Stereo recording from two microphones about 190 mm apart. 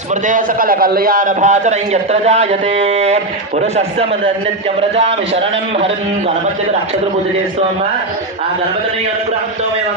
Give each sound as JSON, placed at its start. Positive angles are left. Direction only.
{"t": 0.3, "sound": "a man's voice", "side_deg": -45}
{"t": 4.8, "sound": "a man's voice", "side_deg": -30}